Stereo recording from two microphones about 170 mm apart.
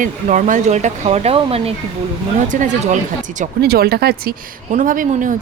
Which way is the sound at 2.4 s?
50° right (ahead or behind).